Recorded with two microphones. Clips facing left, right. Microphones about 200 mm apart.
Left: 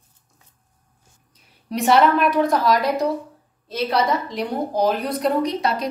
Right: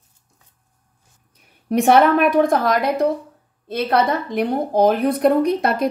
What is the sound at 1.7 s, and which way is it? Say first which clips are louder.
A woman's voice: right 3 dB; 55° right (ahead or behind).